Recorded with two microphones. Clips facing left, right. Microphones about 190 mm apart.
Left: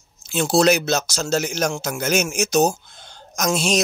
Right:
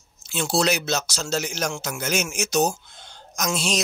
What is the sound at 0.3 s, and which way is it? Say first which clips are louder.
Speech: left 6 dB; 45° left (ahead or behind).